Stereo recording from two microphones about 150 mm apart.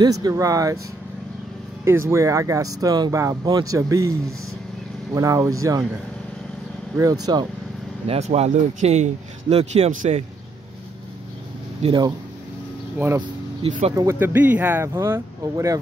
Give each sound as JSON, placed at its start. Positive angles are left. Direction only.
{"t": 0.0, "sound": "speech", "side_deg": -25}
{"t": 1.9, "sound": "speech", "side_deg": -20}
{"t": 5.1, "sound": "speech", "side_deg": -20}
{"t": 7.0, "sound": "speech", "side_deg": -25}
{"t": 8.1, "sound": "speech", "side_deg": -45}
{"t": 11.8, "sound": "speech", "side_deg": -35}
{"t": 13.0, "sound": "speech", "side_deg": -15}
{"t": 13.6, "sound": "speech", "side_deg": -40}
{"t": 13.9, "sound": "speech", "side_deg": -15}